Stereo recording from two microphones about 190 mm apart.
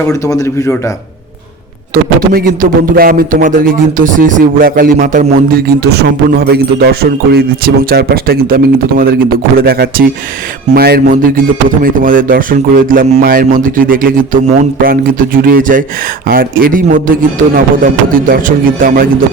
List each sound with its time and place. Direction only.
0.1 s speech: 15° left (ahead or behind)
2.3 s a man's voice: 50° right (ahead or behind)